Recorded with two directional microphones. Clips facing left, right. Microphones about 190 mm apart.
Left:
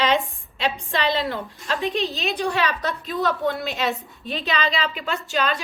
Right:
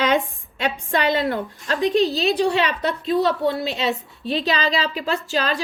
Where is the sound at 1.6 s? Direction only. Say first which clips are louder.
Right 6 dB; 40° right (ahead or behind).